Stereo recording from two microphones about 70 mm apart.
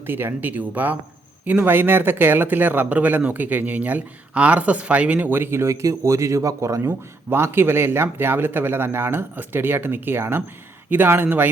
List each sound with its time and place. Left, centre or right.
0.0 s speech: right
7.3 s speech: right